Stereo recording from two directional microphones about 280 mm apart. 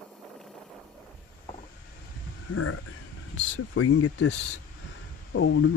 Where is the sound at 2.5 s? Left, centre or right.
Left.